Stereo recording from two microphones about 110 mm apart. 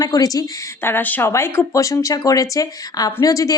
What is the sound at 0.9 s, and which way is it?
A woman's voice, 15° left (ahead or behind).